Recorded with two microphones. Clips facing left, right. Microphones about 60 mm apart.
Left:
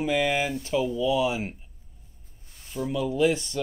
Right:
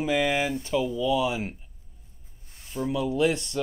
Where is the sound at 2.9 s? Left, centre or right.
Centre.